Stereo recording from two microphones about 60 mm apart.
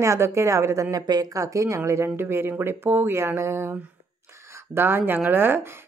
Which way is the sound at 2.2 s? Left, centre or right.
Right.